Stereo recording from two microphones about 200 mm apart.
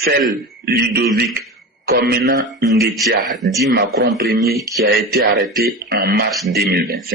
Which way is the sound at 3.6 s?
50° right (ahead or behind).